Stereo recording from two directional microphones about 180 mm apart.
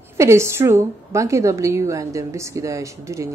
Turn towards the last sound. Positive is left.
turn(degrees=-15)  # may be behind; listen again after turning